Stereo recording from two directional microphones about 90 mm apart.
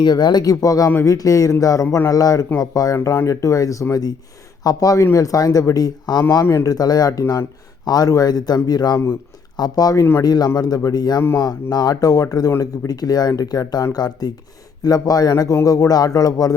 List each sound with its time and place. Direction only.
0.0 s speech: 55° left (ahead or behind)
6.4 s speech: 35° left (ahead or behind)